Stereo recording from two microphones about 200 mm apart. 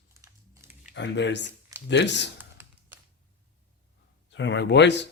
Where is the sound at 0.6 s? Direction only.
15° right (ahead or behind).